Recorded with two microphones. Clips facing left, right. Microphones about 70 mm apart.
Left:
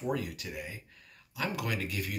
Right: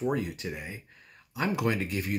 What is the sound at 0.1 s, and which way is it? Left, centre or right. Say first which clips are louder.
Speech: right 3 dB; right.